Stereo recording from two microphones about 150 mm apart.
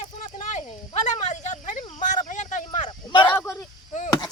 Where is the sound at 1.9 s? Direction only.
55° left (ahead or behind).